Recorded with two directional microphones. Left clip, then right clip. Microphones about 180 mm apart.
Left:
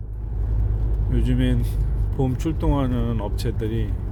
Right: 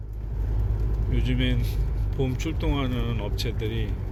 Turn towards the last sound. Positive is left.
turn(degrees=40)  # may be behind; listen again after turning